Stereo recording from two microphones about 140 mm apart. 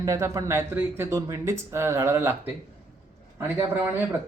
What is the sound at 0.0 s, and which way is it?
Speech, 20° right (ahead or behind).